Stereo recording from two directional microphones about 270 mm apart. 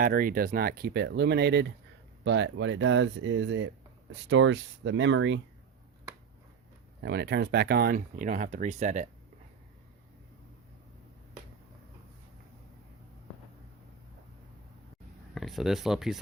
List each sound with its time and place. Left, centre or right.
0.0 s speech: right
7.0 s speech: right
15.4 s speech: centre